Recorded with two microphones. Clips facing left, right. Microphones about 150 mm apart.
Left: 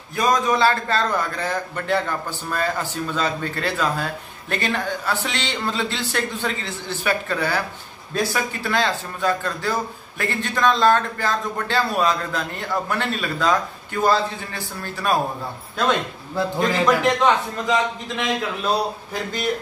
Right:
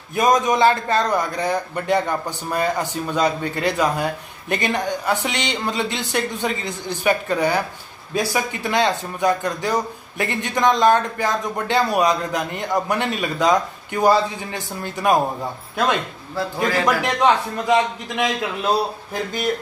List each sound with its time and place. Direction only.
0.1 s a man's voice: 20° right (ahead or behind)
16.5 s a man's voice: 15° right (ahead or behind)